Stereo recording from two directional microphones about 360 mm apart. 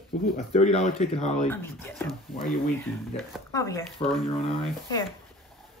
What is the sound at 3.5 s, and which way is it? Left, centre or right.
Speech, centre.